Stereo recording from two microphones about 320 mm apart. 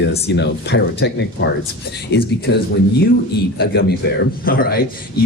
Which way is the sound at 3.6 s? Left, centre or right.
Left.